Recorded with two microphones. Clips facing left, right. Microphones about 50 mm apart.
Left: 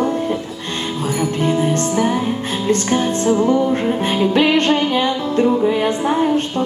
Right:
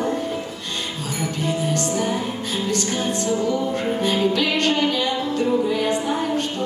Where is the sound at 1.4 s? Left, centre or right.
Left.